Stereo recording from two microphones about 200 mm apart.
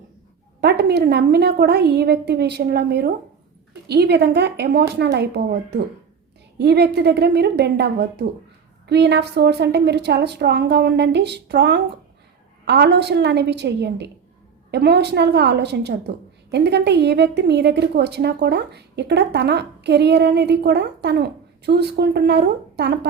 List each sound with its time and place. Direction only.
0.6 s a woman's voice: 55° right (ahead or behind)